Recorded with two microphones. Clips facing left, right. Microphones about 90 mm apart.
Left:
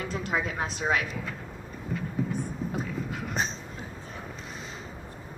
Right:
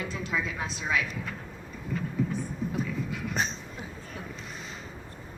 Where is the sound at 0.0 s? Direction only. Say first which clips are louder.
Left 2 dB; 50° left (ahead or behind).